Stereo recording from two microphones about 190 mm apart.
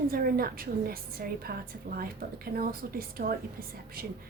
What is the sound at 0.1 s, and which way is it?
A woman's voice, 50° right (ahead or behind).